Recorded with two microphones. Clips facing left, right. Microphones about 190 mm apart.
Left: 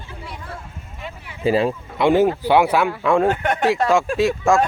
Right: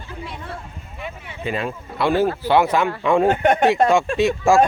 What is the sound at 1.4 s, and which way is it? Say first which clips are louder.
Speech: left 7 dB; 30° left (ahead or behind).